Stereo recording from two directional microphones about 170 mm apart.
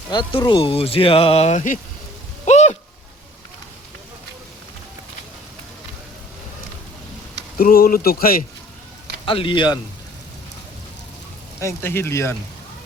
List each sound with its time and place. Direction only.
0.1 s speech: 30° left (ahead or behind); by 1.8 s 45° left (ahead or behind)
2.4 s a sound: 40° left (ahead or behind)
7.6 s speech: 60° left (ahead or behind)
9.2 s a man's voice: 30° left (ahead or behind)
11.6 s speech: 15° left (ahead or behind)